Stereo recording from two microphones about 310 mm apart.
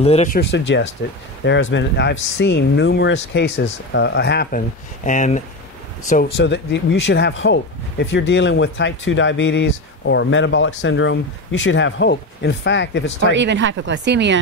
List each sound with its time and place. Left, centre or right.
0.0 s speech: left
13.3 s speech: right